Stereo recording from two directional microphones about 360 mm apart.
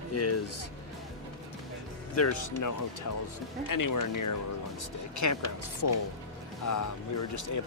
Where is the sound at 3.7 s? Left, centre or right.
Left.